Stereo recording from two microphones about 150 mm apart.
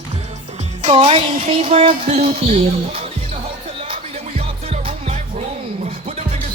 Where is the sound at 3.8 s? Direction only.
40° right (ahead or behind).